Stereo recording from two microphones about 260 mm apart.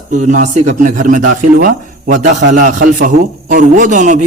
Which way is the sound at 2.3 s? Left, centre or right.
Right.